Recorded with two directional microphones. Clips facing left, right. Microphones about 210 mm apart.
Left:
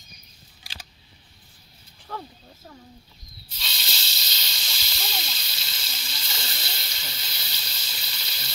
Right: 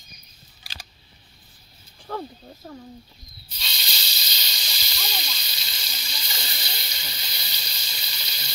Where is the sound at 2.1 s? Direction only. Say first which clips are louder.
Right 5 dB; 35° right (ahead or behind).